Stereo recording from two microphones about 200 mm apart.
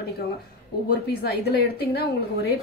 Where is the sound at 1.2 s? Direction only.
55° left (ahead or behind).